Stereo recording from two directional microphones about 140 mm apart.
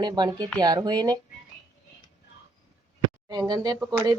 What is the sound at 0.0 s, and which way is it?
A woman's voice, 30° right (ahead or behind).